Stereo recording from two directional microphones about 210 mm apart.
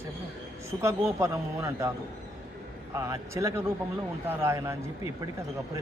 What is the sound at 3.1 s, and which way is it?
A man's voice, 15° right (ahead or behind).